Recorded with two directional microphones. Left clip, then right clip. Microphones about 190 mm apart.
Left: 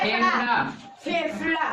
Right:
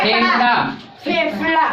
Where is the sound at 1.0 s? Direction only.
Centre (ahead or behind).